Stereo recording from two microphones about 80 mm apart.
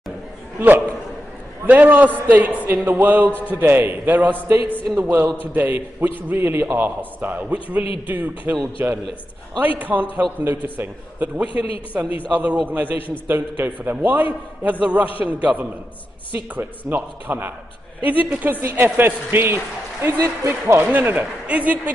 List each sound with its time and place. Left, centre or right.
0.6 s a man's voice: right
3.3 s a man's voice: left
3.5 s a man's voice: right